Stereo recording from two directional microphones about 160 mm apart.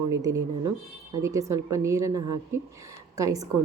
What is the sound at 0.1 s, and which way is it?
A woman's voice, 20° right (ahead or behind).